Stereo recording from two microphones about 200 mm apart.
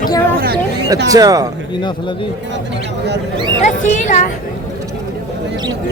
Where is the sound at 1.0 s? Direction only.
15° right (ahead or behind).